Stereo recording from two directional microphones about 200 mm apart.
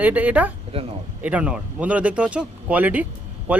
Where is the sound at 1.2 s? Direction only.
5° right (ahead or behind).